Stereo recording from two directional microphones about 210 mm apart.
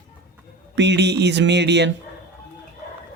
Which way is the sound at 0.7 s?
55° right (ahead or behind).